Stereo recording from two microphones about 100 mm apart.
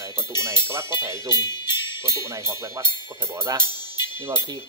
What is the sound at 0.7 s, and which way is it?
Speech, 25° right (ahead or behind).